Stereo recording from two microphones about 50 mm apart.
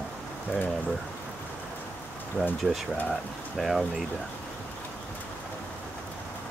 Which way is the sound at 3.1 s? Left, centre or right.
Centre.